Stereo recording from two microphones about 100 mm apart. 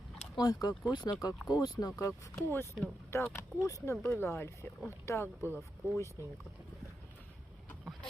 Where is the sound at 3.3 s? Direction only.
30° left (ahead or behind).